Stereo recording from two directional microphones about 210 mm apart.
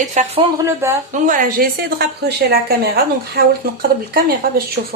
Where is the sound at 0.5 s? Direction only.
10° right (ahead or behind).